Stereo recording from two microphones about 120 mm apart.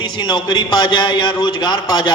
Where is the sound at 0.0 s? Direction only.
40° left (ahead or behind).